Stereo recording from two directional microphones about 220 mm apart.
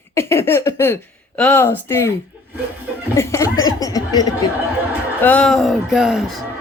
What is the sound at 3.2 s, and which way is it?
Speech, 15° left (ahead or behind).